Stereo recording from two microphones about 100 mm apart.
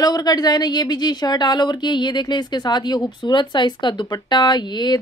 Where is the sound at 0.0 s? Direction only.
40° left (ahead or behind).